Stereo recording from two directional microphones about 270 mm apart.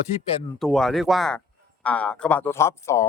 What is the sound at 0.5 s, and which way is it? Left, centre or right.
A man's voice, centre.